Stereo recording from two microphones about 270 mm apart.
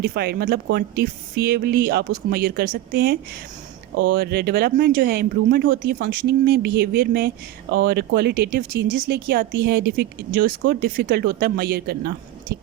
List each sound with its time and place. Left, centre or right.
0.0 s speech: right